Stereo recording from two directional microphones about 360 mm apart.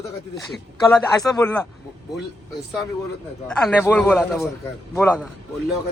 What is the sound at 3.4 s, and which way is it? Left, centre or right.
A man's voice, centre.